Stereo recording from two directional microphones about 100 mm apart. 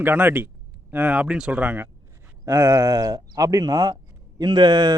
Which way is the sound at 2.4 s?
30° right (ahead or behind).